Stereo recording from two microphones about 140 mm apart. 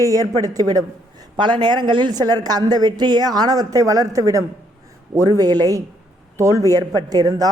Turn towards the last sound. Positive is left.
turn(degrees=-25)  # may be behind; listen again after turning